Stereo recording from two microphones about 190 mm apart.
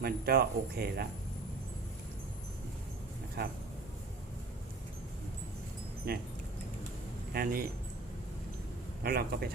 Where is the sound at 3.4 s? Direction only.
55° right (ahead or behind).